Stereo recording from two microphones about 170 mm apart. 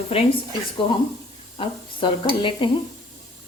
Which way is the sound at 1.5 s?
30° left (ahead or behind).